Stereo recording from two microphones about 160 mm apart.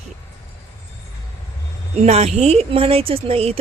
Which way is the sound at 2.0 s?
40° right (ahead or behind).